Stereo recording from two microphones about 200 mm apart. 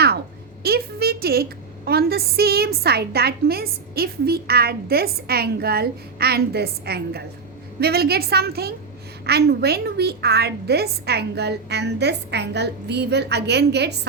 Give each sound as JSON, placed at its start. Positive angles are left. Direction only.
{"t": 0.6, "sound": "a woman's voice", "side_deg": -50}